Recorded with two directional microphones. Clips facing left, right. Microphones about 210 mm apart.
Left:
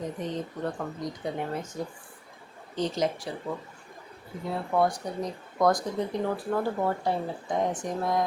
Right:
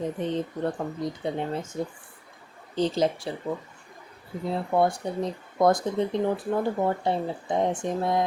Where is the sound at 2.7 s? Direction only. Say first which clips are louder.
Right 4 dB; 30° right (ahead or behind).